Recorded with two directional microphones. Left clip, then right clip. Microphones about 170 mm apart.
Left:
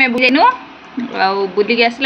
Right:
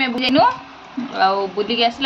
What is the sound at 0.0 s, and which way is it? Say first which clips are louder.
A woman's voice: left 5 dB; 20° left (ahead or behind).